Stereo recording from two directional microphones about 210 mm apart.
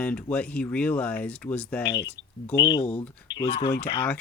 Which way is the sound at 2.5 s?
20° left (ahead or behind).